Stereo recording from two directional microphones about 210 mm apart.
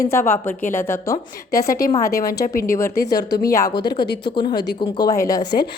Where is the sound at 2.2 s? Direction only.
45° left (ahead or behind).